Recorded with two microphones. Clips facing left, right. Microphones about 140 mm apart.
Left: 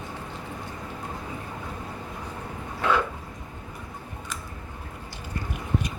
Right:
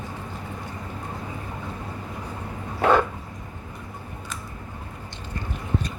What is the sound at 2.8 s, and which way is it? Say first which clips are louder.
Dog: right 5 dB; 50° right (ahead or behind).